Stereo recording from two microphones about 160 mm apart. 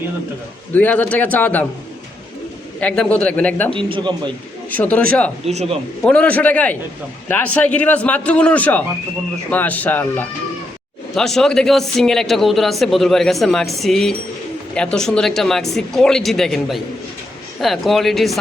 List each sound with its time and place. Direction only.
0.7 s a man's voice: 10° left (ahead or behind)
2.8 s a man's voice: 5° left (ahead or behind)
3.7 s a man's voice: 35° right (ahead or behind)
4.7 s a man's voice: 10° left (ahead or behind)